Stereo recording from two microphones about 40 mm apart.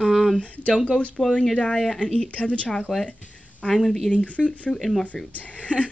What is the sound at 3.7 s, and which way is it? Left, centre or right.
Speech, centre.